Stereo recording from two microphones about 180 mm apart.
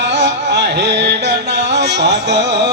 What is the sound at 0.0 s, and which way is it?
Music, 70° right (ahead or behind).